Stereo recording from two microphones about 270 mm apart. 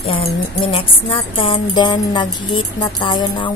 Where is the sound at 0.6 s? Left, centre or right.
Centre.